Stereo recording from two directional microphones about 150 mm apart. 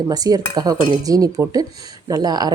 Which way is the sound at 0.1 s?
25° right (ahead or behind).